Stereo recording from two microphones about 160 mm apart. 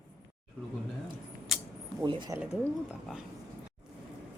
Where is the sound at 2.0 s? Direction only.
25° right (ahead or behind).